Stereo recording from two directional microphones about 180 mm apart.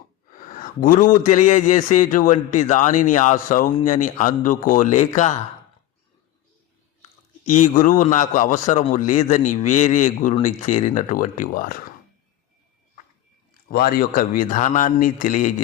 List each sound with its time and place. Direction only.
0.3 s a man's voice: 50° left (ahead or behind)
7.4 s a man's voice: 45° left (ahead or behind)
13.7 s a man's voice: 55° left (ahead or behind)